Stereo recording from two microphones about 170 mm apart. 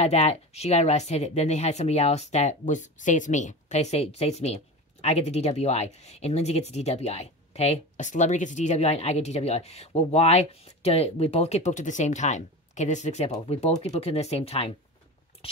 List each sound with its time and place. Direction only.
0.0 s speech: 40° left (ahead or behind)